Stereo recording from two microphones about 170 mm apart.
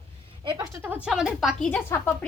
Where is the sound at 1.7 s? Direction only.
10° left (ahead or behind).